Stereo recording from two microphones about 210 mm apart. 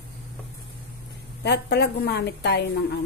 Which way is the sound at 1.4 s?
55° left (ahead or behind).